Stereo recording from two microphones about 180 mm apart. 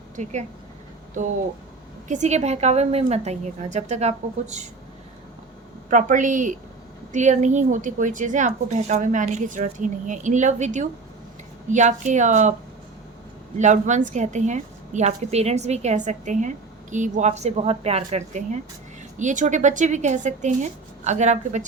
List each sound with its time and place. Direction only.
0.2 s a woman's voice: 40° right (ahead or behind)
2.0 s a woman's voice: 40° right (ahead or behind)
5.9 s a woman's voice: 45° right (ahead or behind)
13.6 s a woman's voice: 40° right (ahead or behind)